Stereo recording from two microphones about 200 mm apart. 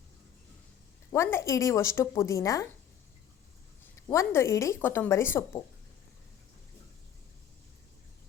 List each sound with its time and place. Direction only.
1.1 s a woman's voice: 15° left (ahead or behind)
3.9 s a woman's voice: 15° left (ahead or behind)